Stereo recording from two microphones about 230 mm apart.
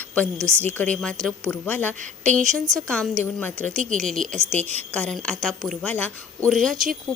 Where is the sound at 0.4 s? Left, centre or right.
Centre.